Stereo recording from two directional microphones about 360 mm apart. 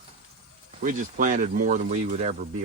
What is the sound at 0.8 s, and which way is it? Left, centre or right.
Speech, right.